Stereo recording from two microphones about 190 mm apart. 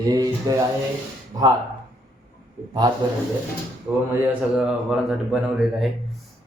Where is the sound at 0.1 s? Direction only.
20° right (ahead or behind).